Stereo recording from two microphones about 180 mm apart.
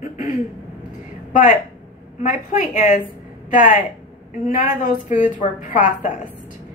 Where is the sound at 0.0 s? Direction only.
40° left (ahead or behind).